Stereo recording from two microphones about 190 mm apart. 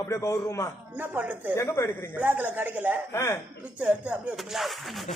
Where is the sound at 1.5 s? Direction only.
15° left (ahead or behind).